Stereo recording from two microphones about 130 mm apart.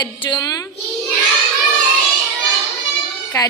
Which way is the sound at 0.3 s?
30° left (ahead or behind).